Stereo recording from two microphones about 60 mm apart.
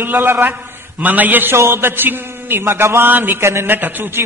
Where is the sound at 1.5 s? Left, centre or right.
Right.